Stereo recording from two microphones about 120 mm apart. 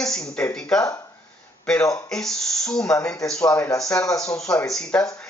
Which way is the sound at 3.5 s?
20° left (ahead or behind).